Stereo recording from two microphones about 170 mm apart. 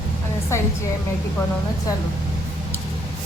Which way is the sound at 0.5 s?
15° left (ahead or behind).